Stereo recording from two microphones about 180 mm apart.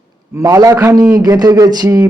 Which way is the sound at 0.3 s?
20° right (ahead or behind).